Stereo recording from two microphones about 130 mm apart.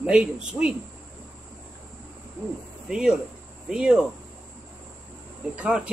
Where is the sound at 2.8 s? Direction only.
5° right (ahead or behind).